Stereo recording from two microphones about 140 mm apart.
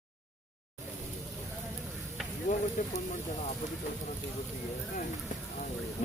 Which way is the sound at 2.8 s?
65° left (ahead or behind).